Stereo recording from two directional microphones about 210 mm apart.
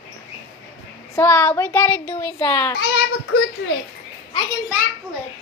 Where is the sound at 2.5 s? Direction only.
20° left (ahead or behind).